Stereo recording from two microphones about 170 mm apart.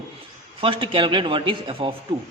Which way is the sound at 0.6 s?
30° right (ahead or behind).